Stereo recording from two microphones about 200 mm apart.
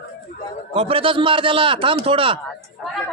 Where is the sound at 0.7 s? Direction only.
25° right (ahead or behind).